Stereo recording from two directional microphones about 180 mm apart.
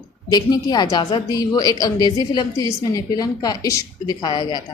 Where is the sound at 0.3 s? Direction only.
20° left (ahead or behind).